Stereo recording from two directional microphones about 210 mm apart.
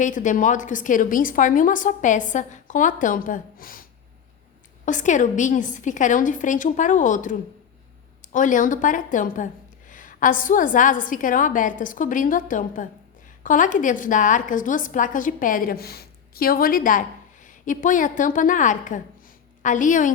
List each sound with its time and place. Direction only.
0.0 s speech: 35° left (ahead or behind)
4.9 s speech: 35° left (ahead or behind)